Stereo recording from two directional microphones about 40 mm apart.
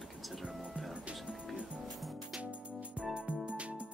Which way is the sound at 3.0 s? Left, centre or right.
Right.